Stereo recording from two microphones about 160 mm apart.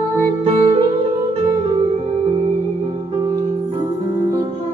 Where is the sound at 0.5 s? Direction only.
35° right (ahead or behind).